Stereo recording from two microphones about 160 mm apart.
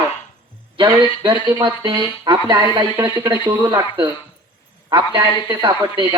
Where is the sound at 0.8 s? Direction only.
30° right (ahead or behind).